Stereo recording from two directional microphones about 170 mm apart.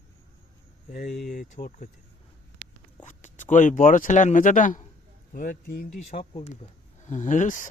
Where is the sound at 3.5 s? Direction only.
50° left (ahead or behind).